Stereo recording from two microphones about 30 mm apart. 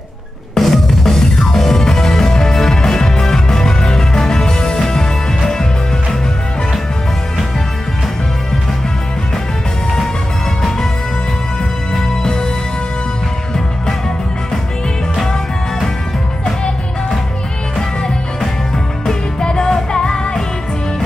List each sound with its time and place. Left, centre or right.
0.6 s music: centre
12.1 s music: left
19.4 s music: left